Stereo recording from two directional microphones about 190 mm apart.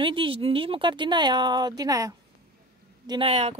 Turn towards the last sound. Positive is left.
turn(degrees=-30)  # may be behind; listen again after turning